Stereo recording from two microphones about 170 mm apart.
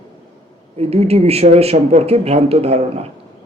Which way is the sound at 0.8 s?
35° right (ahead or behind).